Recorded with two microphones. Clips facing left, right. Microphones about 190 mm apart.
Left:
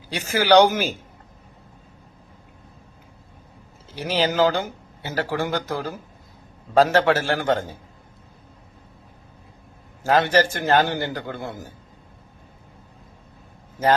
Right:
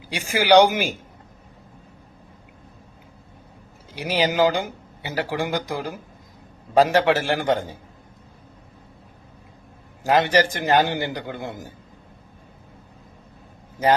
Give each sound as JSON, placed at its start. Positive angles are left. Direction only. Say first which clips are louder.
{"t": 0.1, "sound": "speech", "louder": "even", "side_deg": -10}
{"t": 3.9, "sound": "speech", "louder": "even", "side_deg": -10}
{"t": 10.0, "sound": "speech", "louder": "even", "side_deg": -15}